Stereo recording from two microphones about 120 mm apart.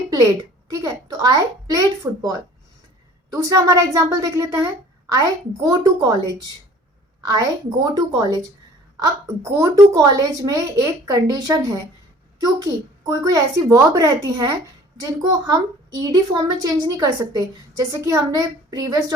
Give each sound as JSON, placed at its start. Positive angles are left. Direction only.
{"t": 0.7, "sound": "a woman's voice", "side_deg": -30}
{"t": 3.3, "sound": "a woman's voice", "side_deg": -30}
{"t": 7.9, "sound": "a woman's voice", "side_deg": -35}